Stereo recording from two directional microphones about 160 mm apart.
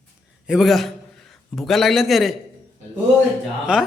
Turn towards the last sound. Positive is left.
turn(degrees=-5)  # may be behind; listen again after turning